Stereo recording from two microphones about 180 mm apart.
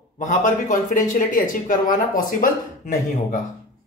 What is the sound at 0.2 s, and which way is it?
Speech, 45° left (ahead or behind).